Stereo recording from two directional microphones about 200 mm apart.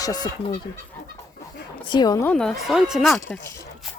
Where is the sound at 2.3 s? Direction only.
Centre (ahead or behind).